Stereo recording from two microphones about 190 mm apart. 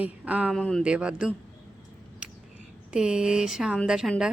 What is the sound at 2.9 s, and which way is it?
A woman's voice, 5° right (ahead or behind).